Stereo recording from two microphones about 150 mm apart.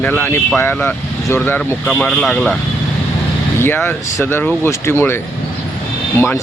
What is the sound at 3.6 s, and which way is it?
Speech, 15° left (ahead or behind).